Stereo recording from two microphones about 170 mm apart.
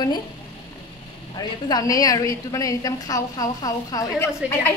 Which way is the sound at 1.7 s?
20° left (ahead or behind).